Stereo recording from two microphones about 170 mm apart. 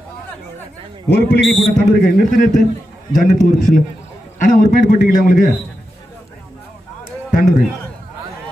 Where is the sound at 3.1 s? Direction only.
50° left (ahead or behind).